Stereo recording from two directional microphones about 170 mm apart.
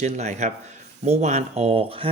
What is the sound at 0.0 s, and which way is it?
Speech, 45° right (ahead or behind).